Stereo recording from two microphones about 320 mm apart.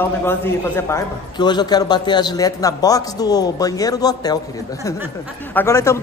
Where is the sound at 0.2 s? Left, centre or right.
Centre.